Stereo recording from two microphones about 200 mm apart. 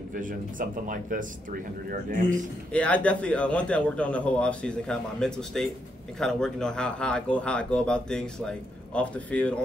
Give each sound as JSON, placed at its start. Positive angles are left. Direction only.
{"t": 0.1, "sound": "speech", "side_deg": -40}
{"t": 2.7, "sound": "speech", "side_deg": 5}